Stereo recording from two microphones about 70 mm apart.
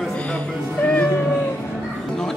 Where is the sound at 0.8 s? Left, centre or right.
Centre.